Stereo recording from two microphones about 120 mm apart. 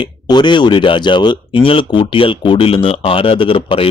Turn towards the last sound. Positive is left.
turn(degrees=50)  # may be behind; listen again after turning